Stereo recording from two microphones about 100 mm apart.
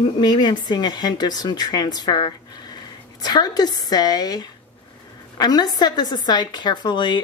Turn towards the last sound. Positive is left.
turn(degrees=50)  # may be behind; listen again after turning